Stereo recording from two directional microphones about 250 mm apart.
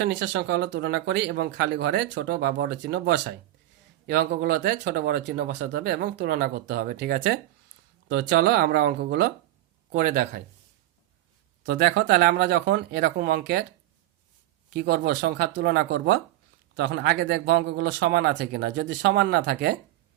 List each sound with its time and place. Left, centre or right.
0.0 s speech: right
11.6 s speech: right
14.7 s speech: right